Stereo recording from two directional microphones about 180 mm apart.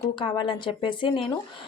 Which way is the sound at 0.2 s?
25° left (ahead or behind).